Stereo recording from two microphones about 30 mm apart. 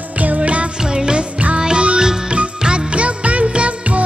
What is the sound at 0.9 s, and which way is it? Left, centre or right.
Music, right.